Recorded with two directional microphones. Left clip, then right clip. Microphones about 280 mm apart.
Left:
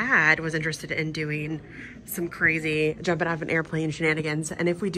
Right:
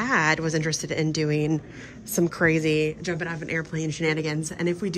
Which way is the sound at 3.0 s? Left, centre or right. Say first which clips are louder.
Left 4 dB; centre.